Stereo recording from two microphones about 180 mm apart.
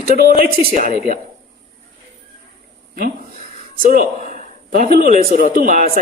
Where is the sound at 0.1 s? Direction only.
55° right (ahead or behind).